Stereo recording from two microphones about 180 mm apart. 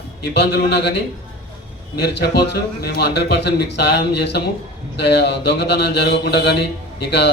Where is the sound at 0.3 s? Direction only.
65° left (ahead or behind).